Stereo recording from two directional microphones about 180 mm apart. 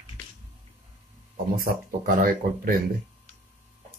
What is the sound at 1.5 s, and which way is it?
Speech, 50° right (ahead or behind).